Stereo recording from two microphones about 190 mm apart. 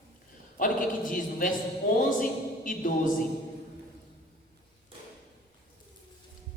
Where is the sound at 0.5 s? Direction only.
45° left (ahead or behind).